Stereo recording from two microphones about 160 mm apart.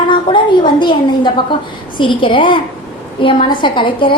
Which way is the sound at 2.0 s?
30° left (ahead or behind).